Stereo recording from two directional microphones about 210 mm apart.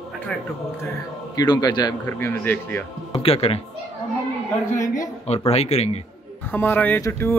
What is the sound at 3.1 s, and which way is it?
Speech, 30° left (ahead or behind).